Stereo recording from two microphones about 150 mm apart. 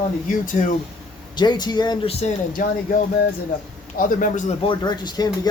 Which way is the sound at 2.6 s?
65° left (ahead or behind).